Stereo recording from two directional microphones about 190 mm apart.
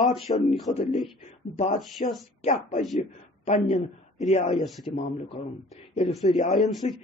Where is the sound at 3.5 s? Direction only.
35° left (ahead or behind).